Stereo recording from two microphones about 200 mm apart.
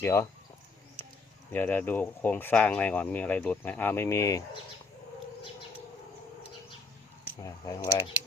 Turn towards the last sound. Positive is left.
turn(degrees=15)  # may be behind; listen again after turning